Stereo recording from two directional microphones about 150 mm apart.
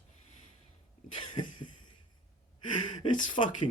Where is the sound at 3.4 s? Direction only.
45° left (ahead or behind).